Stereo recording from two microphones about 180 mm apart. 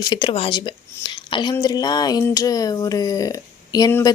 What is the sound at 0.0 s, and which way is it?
Speech, 25° left (ahead or behind).